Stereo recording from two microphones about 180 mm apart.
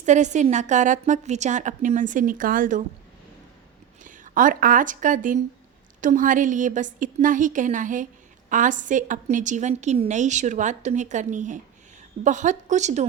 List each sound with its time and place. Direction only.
0.0 s a woman's voice: 40° right (ahead or behind)
4.0 s a woman's voice: 45° right (ahead or behind)